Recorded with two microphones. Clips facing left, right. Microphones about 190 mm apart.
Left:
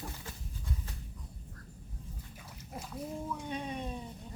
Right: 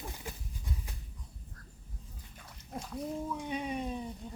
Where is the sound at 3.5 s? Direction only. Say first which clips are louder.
Right 3 dB; 10° right (ahead or behind).